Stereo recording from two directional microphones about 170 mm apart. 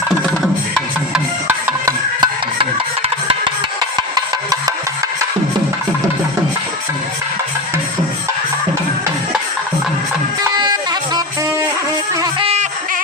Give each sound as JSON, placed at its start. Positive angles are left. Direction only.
{"t": 1.8, "sound": "a sound", "side_deg": -25}
{"t": 4.1, "sound": "music", "side_deg": -20}
{"t": 10.6, "sound": "music", "side_deg": -25}
{"t": 12.2, "sound": "music", "side_deg": -35}